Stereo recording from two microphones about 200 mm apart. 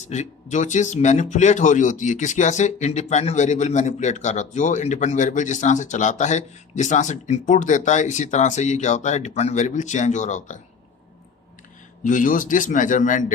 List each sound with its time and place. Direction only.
0.1 s speech: 35° left (ahead or behind)
12.0 s speech: 40° left (ahead or behind)